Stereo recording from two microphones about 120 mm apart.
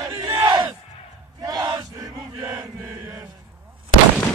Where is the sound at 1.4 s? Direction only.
30° right (ahead or behind).